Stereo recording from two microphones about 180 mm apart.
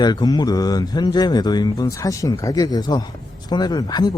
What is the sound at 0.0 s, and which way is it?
Speech, 25° left (ahead or behind).